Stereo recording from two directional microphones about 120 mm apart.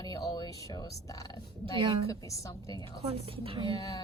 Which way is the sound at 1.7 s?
45° right (ahead or behind).